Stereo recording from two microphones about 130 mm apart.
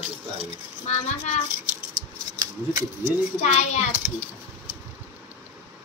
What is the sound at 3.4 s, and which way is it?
Speech, 60° left (ahead or behind).